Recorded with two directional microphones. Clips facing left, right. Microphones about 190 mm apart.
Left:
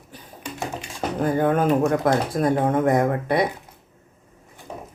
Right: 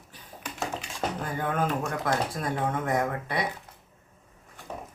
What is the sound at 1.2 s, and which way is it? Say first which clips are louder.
A man's voice: left 11 dB; 45° left (ahead or behind).